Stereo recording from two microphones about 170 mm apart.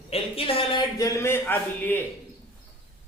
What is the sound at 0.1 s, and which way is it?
A man's voice, 35° left (ahead or behind).